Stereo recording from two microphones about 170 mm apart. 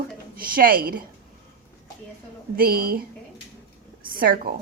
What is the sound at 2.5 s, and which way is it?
Speech, 60° right (ahead or behind).